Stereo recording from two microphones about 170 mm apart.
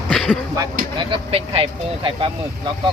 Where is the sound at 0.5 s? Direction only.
25° right (ahead or behind).